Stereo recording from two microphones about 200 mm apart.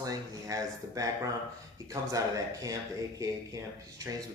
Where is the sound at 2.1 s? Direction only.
15° right (ahead or behind).